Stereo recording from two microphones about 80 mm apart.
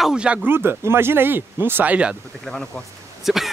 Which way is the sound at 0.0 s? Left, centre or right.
Centre.